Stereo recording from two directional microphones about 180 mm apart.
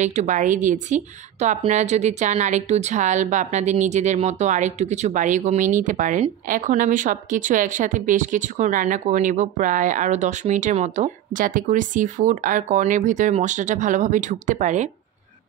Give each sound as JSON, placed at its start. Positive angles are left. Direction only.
{"t": 0.0, "sound": "speech", "side_deg": -40}